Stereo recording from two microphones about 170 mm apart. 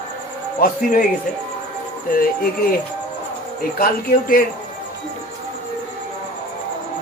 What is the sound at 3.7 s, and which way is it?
Speech, 60° left (ahead or behind).